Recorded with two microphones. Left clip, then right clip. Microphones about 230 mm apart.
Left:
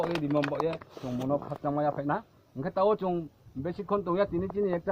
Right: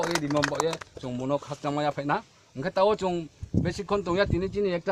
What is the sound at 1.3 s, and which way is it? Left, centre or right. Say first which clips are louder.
Speech: right 2 dB; right.